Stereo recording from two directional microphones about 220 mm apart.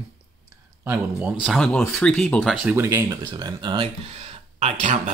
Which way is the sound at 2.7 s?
10° right (ahead or behind).